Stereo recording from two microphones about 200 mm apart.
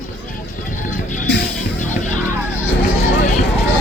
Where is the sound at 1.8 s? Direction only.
40° left (ahead or behind).